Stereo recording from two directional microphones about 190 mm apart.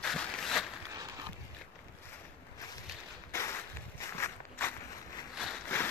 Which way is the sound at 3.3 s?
15° left (ahead or behind).